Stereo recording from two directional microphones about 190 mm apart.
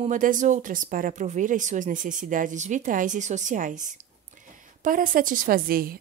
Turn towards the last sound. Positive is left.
turn(degrees=-50)  # may be behind; listen again after turning